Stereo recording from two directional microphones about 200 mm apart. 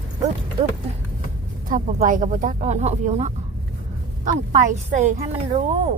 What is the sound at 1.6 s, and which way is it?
A woman's voice, 40° right (ahead or behind).